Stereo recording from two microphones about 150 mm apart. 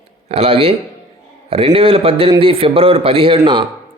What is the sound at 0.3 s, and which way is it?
A man's voice, 40° right (ahead or behind).